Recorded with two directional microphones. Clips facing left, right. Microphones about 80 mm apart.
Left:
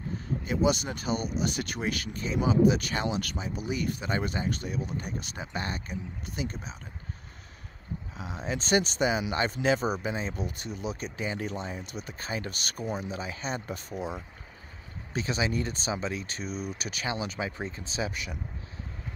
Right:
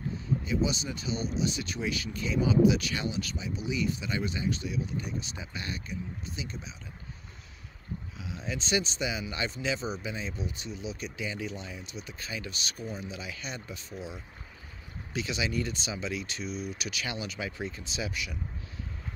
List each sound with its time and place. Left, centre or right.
0.2 s speech: left
8.2 s speech: left
15.1 s speech: left